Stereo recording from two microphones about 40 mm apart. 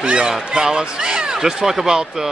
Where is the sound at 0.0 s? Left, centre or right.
Right.